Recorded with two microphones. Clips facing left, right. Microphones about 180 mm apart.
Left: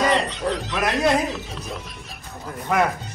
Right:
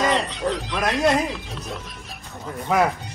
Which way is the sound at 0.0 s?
Centre (ahead or behind).